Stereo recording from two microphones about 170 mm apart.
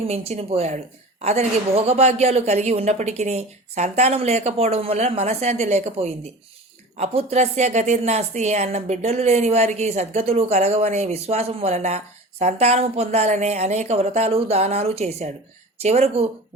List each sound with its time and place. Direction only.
0.1 s speech: 40° right (ahead or behind)